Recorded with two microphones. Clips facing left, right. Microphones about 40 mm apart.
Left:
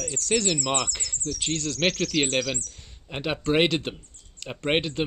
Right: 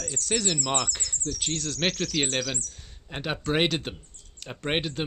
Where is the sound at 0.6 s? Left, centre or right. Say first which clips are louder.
Left 1 dB; centre.